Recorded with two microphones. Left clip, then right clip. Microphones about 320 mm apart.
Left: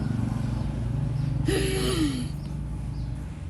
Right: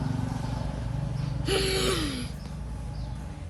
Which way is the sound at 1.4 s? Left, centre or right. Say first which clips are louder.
Right 1 dB; right.